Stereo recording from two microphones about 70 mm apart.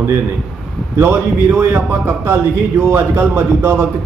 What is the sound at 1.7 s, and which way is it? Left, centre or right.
A man's voice, right.